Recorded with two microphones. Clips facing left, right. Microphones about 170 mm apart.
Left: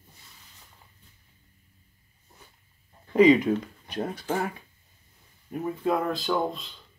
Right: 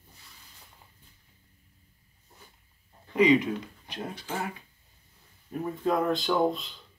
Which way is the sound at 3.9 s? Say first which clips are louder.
Left 6 dB; 50° left (ahead or behind).